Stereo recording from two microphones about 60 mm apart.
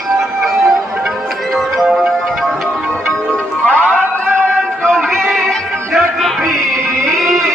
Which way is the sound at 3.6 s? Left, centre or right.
Left.